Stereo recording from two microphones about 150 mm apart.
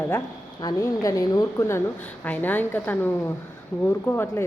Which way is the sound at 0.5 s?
25° left (ahead or behind).